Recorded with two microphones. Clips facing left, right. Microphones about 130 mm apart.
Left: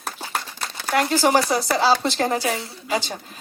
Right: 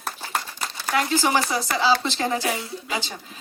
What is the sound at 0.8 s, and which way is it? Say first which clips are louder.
Crumpling: left 3 dB; 50° left (ahead or behind).